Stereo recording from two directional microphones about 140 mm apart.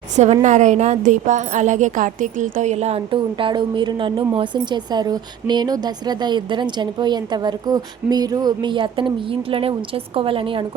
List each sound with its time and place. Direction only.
0.4 s a woman's voice: 60° right (ahead or behind); by 10.7 s 40° right (ahead or behind)